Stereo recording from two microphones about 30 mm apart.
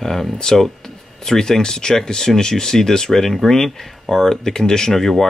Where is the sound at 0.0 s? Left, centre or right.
Centre.